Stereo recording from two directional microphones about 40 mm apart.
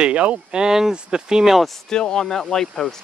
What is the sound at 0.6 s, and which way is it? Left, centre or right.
Speech, centre.